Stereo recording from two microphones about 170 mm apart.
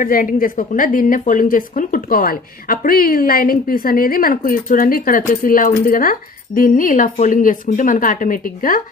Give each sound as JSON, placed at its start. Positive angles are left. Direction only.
{"t": 0.0, "sound": "a woman's voice", "side_deg": 55}